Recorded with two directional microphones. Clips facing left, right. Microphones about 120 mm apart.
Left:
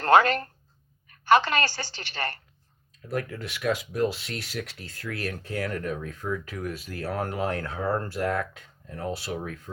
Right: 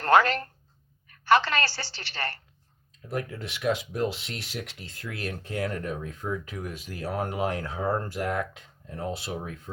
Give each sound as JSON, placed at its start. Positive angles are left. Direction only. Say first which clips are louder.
{"t": 0.1, "sound": "a woman's voice", "louder": "left 2 dB", "side_deg": 20}
{"t": 3.1, "sound": "speech", "louder": "left 1 dB", "side_deg": -25}